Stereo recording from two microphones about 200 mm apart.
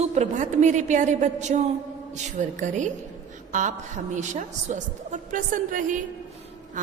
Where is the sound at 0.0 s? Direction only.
35° right (ahead or behind).